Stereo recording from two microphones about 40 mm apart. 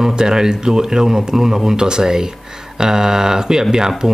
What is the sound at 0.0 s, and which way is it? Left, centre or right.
Speech, centre.